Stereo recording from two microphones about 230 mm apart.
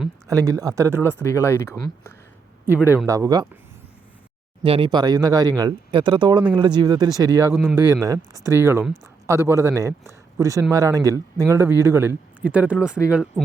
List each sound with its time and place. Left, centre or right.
0.3 s speech: centre
1.0 s speech: centre
2.9 s speech: centre
4.6 s speech: right; by 13.4 s centre